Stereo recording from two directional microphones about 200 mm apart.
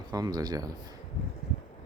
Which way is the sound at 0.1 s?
20° right (ahead or behind).